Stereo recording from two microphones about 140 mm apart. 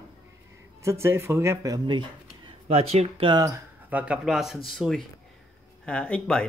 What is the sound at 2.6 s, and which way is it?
Speech, 50° right (ahead or behind).